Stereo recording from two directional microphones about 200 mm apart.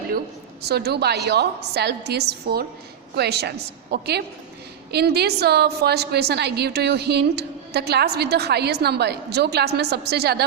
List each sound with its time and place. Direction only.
0.6 s a woman's voice: 55° right (ahead or behind)